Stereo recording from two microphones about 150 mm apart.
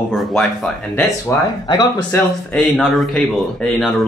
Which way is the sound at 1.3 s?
15° left (ahead or behind).